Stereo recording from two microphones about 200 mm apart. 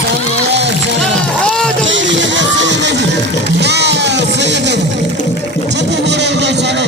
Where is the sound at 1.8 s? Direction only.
70° right (ahead or behind).